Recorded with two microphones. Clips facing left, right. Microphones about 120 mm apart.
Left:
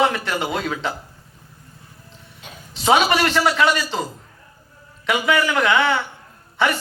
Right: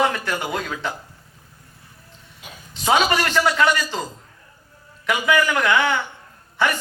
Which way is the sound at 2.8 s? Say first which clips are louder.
Left 2 dB; 20° left (ahead or behind).